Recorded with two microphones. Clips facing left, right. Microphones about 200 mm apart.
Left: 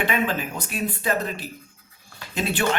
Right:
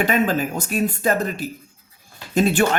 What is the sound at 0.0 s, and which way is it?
Speech, 40° right (ahead or behind).